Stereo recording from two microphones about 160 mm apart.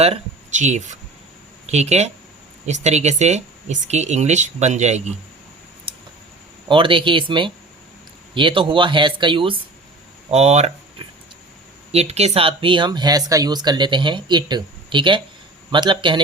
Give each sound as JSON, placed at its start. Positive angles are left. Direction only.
{"t": 0.0, "sound": "speech", "side_deg": -45}
{"t": 5.9, "sound": "a sound", "side_deg": -35}
{"t": 6.7, "sound": "speech", "side_deg": -30}
{"t": 10.3, "sound": "speech", "side_deg": -40}